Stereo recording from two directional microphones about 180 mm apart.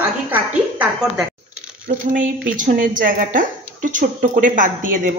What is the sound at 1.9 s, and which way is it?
Speech, 45° right (ahead or behind).